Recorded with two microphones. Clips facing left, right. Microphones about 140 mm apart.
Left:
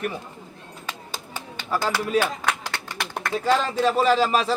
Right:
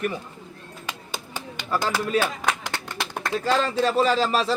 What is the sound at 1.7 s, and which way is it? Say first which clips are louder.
Speech: left 1 dB; 5° left (ahead or behind).